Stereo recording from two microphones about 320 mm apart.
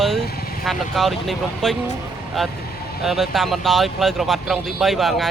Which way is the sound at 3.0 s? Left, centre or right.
Centre.